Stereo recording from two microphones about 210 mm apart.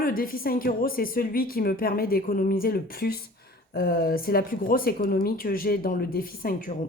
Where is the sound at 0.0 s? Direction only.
45° left (ahead or behind).